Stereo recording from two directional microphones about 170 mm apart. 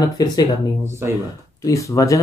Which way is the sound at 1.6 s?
20° left (ahead or behind).